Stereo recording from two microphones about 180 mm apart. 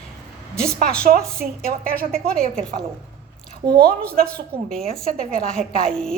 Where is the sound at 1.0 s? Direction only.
55° right (ahead or behind).